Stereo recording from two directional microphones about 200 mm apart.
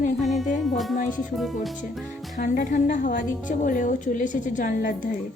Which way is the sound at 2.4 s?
40° left (ahead or behind).